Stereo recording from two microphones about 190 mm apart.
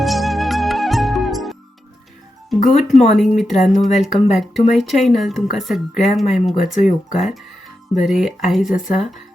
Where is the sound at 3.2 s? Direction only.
Centre (ahead or behind).